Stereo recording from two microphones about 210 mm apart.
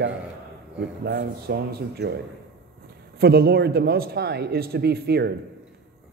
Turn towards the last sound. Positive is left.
turn(degrees=-50)  # may be behind; listen again after turning